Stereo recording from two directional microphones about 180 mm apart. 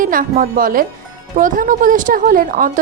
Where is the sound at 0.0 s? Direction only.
50° right (ahead or behind).